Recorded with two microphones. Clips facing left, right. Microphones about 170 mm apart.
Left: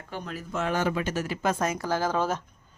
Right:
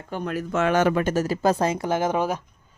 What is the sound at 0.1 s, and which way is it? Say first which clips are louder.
Speech: right 8 dB; 65° right (ahead or behind).